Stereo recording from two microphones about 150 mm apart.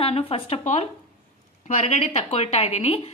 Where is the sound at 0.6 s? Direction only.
50° left (ahead or behind).